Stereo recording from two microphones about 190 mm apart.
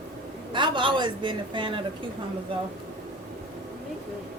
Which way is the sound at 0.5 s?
25° right (ahead or behind).